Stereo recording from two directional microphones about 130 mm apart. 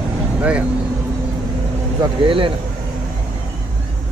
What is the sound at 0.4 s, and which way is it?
Speech, 10° right (ahead or behind).